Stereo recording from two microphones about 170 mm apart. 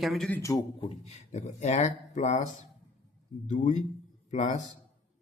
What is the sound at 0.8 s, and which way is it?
Speech, 40° left (ahead or behind).